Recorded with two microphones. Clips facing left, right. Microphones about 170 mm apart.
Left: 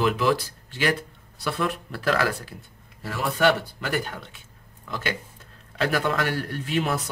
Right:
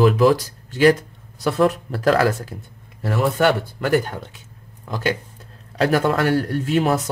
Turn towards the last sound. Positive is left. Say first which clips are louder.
# right 7 dB
turn(degrees=-45)  # may be behind; listen again after turning